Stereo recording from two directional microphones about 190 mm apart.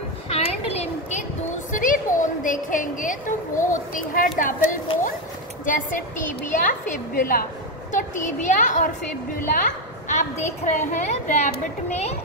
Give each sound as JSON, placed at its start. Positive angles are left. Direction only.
{"t": 0.3, "sound": "a sound", "side_deg": 30}
{"t": 1.7, "sound": "a woman's voice", "side_deg": 45}
{"t": 5.7, "sound": "a woman's voice", "side_deg": 45}